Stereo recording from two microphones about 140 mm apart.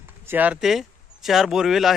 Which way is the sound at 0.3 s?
10° right (ahead or behind).